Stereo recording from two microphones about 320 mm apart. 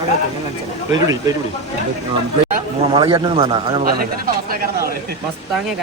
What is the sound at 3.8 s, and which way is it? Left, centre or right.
Speech, right.